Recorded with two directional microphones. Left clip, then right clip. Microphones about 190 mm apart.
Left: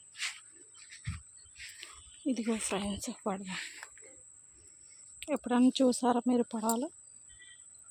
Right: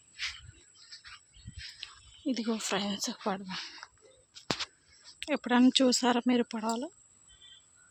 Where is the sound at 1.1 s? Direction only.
25° left (ahead or behind).